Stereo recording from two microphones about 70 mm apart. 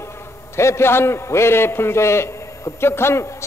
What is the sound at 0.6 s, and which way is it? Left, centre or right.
A man's voice, left.